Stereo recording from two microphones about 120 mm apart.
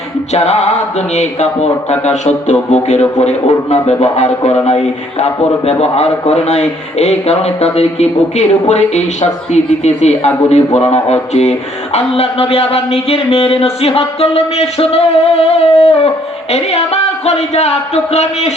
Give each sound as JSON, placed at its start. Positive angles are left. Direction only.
{"t": 0.3, "sound": "a man's voice", "side_deg": 65}
{"t": 11.9, "sound": "a man's voice", "side_deg": 55}